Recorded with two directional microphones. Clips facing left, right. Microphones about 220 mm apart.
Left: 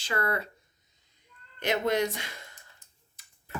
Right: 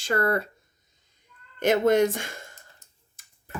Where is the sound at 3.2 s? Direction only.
50° right (ahead or behind).